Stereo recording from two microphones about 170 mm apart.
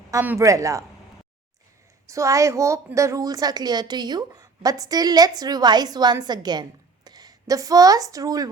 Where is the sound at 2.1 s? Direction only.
20° right (ahead or behind).